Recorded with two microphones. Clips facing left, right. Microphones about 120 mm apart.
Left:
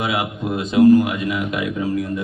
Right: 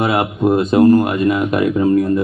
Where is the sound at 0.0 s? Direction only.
55° right (ahead or behind).